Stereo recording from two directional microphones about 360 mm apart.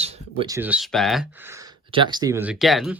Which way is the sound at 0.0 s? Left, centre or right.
Centre.